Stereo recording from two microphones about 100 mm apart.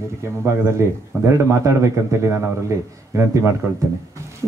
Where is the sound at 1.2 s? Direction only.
30° right (ahead or behind).